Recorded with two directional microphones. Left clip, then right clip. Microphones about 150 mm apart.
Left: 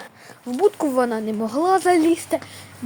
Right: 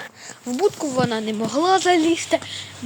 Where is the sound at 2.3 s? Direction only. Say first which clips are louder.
Right 3 dB; 20° left (ahead or behind).